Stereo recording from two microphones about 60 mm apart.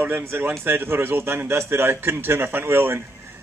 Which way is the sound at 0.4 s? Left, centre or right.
Right.